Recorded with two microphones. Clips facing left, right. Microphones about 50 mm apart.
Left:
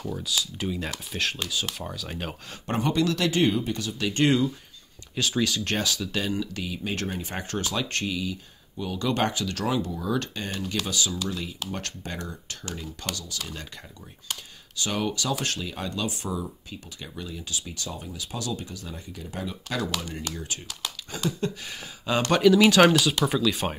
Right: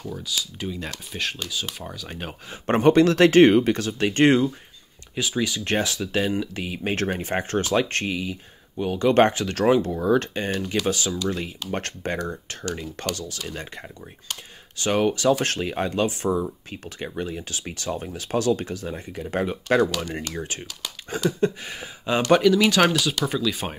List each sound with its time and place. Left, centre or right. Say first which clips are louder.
0.0 s speech: even; centre
2.6 s speech: right 8 dB; right
5.1 s speech: right 1 dB; centre
5.9 s speech: right 4 dB; right
7.3 s speech: right 8 dB; right
13.4 s speech: right 4 dB; right
14.8 s speech: right 7 dB; right
18.9 s speech: right 8 dB; right; by 22.4 s centre
22.4 s speech: left 1 dB; centre